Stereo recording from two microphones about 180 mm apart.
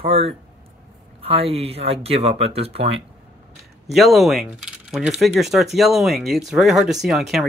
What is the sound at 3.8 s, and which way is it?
Speech, centre (ahead or behind).